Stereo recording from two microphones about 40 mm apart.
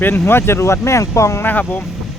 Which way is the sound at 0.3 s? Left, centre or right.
Left.